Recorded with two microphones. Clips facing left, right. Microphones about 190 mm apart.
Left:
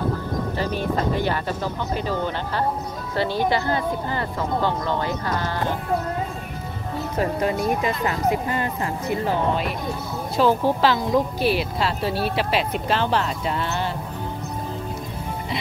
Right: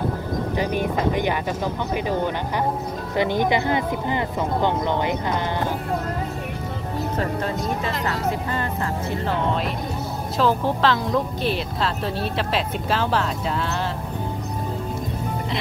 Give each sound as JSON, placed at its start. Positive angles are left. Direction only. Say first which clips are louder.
{"t": 0.6, "sound": "a woman's voice", "louder": "right 1 dB", "side_deg": -15}
{"t": 3.2, "sound": "a woman's voice", "louder": "right 1 dB", "side_deg": -20}
{"t": 7.2, "sound": "speech", "louder": "left 6 dB", "side_deg": 15}
{"t": 10.3, "sound": "speech", "louder": "left 2 dB", "side_deg": 0}